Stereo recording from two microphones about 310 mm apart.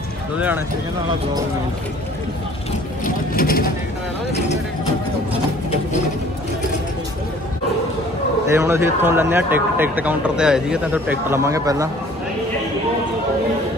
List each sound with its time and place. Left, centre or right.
0.4 s speech: centre
3.3 s speech: left
8.5 s a man's voice: centre